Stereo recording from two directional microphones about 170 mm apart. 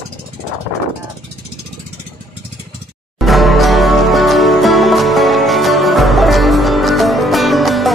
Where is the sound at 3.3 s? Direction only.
Centre (ahead or behind).